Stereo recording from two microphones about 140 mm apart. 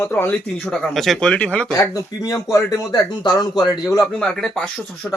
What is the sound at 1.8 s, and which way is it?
Speech, 25° left (ahead or behind).